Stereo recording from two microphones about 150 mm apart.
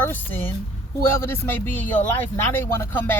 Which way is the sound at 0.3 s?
15° left (ahead or behind).